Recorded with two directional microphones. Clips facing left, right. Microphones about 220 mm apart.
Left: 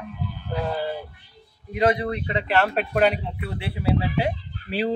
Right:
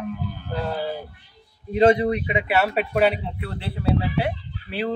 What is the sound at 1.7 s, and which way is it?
A man's voice, 30° right (ahead or behind).